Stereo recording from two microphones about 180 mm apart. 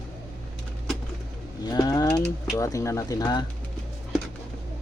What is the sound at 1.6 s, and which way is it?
Ratchet, 20° left (ahead or behind).